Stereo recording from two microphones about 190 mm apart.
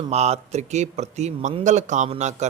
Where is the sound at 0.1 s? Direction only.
35° right (ahead or behind).